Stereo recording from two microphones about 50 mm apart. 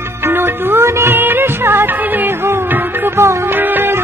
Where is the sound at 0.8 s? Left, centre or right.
Right.